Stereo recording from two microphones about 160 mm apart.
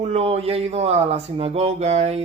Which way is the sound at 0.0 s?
40° right (ahead or behind).